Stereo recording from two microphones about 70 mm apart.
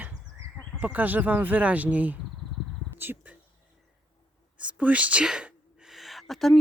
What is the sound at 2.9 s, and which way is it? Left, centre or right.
Bird, right.